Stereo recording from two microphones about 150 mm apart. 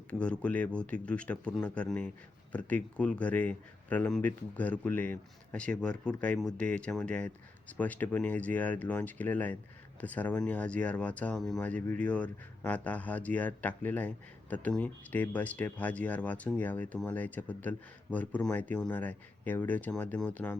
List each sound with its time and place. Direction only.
0.1 s speech: 10° left (ahead or behind)